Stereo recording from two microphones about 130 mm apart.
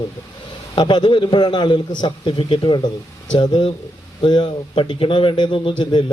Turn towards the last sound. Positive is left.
turn(degrees=40)  # may be behind; listen again after turning